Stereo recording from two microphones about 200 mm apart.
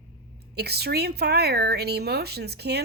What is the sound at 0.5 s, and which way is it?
Speech, 55° right (ahead or behind).